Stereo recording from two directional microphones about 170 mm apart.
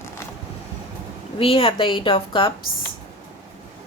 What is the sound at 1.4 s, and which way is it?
A woman's voice, 30° left (ahead or behind).